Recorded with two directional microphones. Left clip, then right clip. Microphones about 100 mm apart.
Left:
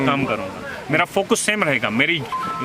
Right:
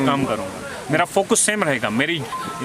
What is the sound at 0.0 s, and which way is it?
A man's voice, 15° right (ahead or behind).